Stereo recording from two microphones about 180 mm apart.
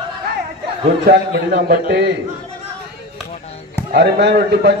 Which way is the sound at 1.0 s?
60° right (ahead or behind).